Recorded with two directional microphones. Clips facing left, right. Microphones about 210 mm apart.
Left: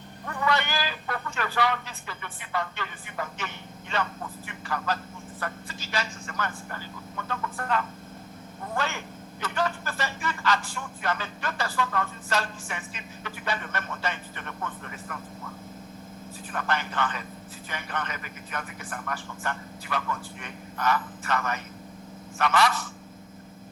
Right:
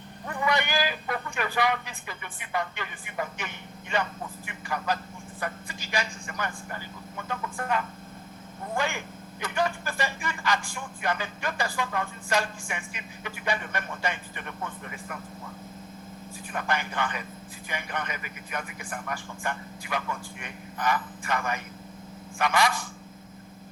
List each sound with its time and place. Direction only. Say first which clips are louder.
0.3 s a sound: even; 15° right (ahead or behind)
8.7 s speech: right 1 dB; 15° right (ahead or behind)
16.5 s speech: even; 15° right (ahead or behind)